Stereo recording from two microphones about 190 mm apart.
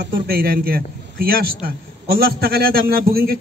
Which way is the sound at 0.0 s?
55° right (ahead or behind).